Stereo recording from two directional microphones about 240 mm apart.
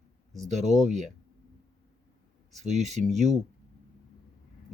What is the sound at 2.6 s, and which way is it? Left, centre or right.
Speech, right.